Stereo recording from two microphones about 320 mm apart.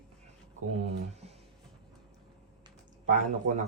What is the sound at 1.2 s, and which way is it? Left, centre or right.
Music, centre.